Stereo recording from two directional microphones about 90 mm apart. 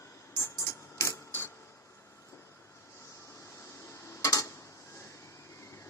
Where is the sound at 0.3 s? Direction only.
35° left (ahead or behind).